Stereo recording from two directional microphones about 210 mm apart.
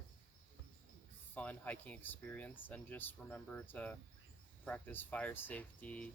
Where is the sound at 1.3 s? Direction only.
5° left (ahead or behind).